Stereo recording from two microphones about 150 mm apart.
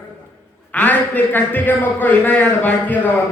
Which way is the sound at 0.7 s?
10° left (ahead or behind).